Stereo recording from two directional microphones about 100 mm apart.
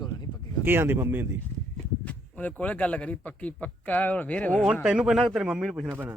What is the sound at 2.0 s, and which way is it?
Speech, 15° left (ahead or behind).